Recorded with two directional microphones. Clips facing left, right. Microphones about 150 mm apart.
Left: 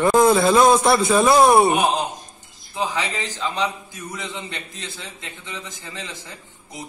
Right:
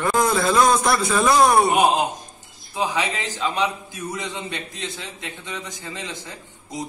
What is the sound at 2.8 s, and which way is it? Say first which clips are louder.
Speech: right 1 dB; 15° right (ahead or behind).